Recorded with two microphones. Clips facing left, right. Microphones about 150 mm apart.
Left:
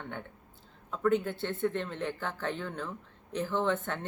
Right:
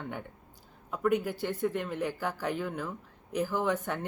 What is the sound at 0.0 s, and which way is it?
Speech, 10° right (ahead or behind).